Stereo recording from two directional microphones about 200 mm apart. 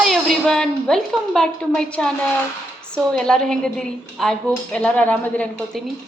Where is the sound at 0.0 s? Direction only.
Centre (ahead or behind).